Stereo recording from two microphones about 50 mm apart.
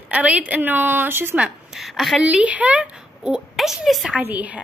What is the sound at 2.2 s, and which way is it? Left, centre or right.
Speech, right.